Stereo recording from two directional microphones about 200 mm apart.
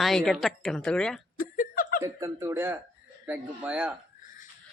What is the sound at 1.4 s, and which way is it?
Chuckle, 45° left (ahead or behind).